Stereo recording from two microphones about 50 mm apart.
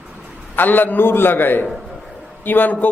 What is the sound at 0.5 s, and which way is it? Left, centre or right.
A man's voice, left.